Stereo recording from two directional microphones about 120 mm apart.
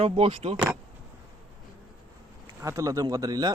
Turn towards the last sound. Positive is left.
turn(degrees=-30)  # may be behind; listen again after turning